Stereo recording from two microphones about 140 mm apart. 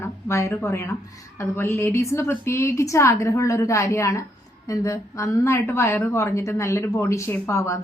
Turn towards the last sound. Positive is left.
turn(degrees=20)  # may be behind; listen again after turning